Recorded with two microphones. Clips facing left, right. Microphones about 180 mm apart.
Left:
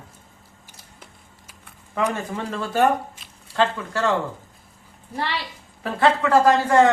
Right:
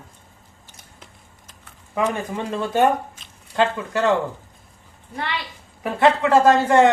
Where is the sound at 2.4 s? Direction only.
15° right (ahead or behind).